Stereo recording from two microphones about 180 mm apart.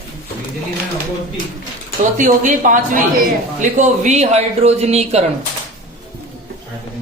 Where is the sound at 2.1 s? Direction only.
45° right (ahead or behind).